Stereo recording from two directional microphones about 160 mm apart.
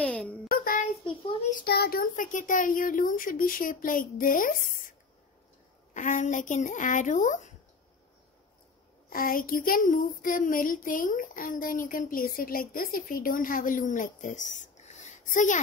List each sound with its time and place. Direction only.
0.0 s a sound: 5° left (ahead or behind)
0.5 s child singing: 60° left (ahead or behind)
1.5 s speech: 70° left (ahead or behind); by 4.9 s 55° left (ahead or behind)
5.9 s speech: 50° left (ahead or behind)
9.1 s speech: 65° left (ahead or behind)